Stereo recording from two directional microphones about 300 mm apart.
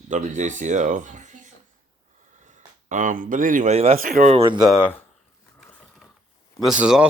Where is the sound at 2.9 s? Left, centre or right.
Right.